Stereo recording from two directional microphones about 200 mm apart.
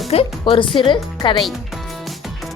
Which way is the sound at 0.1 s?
30° left (ahead or behind).